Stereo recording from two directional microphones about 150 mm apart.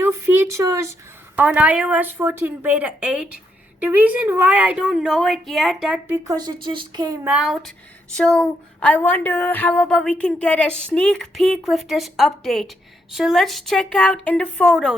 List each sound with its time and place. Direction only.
0.0 s a sound: 15° right (ahead or behind)
1.4 s a woman's voice: 10° right (ahead or behind)
6.1 s a woman's voice: 25° right (ahead or behind)
7.3 s a woman's voice: 5° right (ahead or behind)
8.1 s a woman's voice: 5° left (ahead or behind)